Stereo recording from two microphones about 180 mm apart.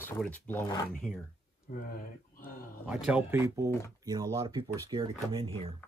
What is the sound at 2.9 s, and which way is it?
Speech, 5° right (ahead or behind).